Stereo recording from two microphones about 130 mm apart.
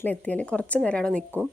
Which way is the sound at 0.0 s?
10° left (ahead or behind).